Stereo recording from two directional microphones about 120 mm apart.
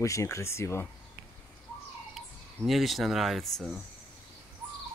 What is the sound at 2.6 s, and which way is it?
Speech, centre (ahead or behind).